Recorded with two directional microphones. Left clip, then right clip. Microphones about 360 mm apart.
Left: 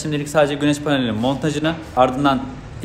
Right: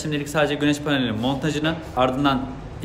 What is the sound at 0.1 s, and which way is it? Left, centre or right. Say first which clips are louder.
A man's voice: left 5 dB; centre.